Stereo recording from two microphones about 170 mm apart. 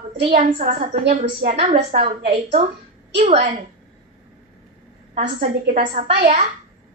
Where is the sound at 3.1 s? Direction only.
35° right (ahead or behind).